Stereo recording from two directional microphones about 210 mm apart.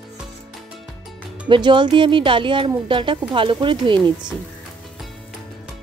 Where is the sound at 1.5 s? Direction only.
20° right (ahead or behind).